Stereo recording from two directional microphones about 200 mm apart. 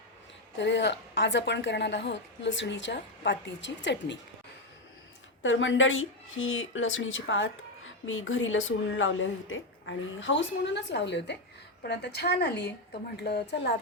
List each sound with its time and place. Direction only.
0.6 s a woman's voice: 60° left (ahead or behind)
5.4 s a woman's voice: 70° left (ahead or behind)